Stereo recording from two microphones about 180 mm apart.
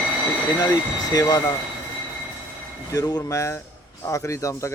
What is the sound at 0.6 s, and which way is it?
Speech, 20° left (ahead or behind).